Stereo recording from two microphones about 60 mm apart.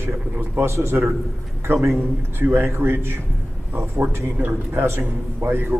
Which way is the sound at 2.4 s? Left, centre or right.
Right.